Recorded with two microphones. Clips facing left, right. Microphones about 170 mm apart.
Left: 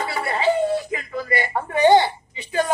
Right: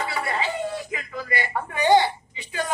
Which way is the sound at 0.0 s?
35° left (ahead or behind).